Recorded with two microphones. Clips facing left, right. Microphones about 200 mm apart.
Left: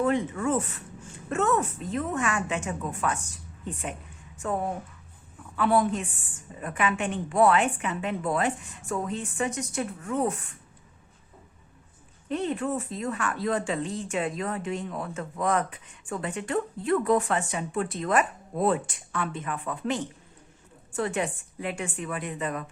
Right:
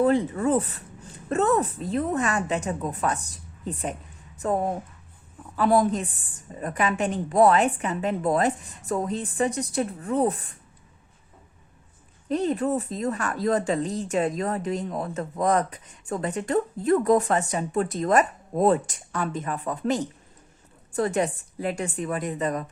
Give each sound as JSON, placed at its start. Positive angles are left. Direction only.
{"t": 0.0, "sound": "speech", "side_deg": -35}
{"t": 12.3, "sound": "speech", "side_deg": -40}